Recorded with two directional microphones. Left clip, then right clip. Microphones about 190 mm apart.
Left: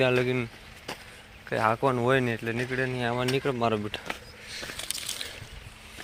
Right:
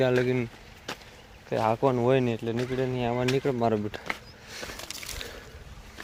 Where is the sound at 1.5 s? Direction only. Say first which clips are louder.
Even; 20° right (ahead or behind).